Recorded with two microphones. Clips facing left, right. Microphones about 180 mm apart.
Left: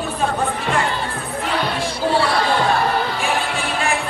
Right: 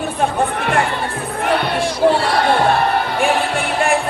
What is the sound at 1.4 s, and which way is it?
Basketball bounce, 60° right (ahead or behind).